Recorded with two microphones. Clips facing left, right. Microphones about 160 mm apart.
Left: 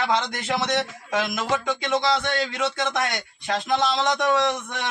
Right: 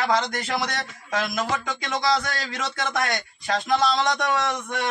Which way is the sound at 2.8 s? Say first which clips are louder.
Even; 20° left (ahead or behind).